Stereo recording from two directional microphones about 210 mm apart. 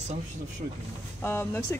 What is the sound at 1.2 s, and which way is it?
Speech, 10° left (ahead or behind).